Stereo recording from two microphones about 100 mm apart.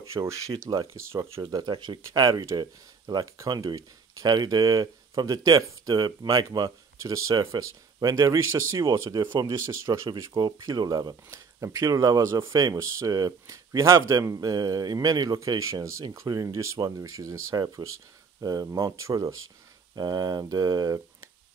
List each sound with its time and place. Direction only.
0.0 s speech: 30° right (ahead or behind)
1.4 s speech: 40° right (ahead or behind)
1.7 s speech: 50° right (ahead or behind); by 8.8 s 30° right (ahead or behind)
8.9 s speech: 45° right (ahead or behind)
9.7 s speech: 30° right (ahead or behind)
11.2 s speech: 30° right (ahead or behind)
20.0 s speech: 45° right (ahead or behind)